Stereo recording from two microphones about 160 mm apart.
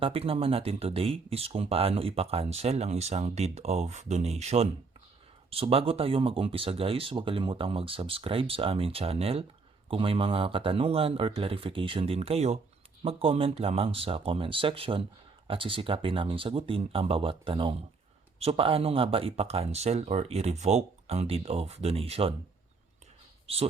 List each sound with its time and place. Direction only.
0.0 s speech: 35° right (ahead or behind)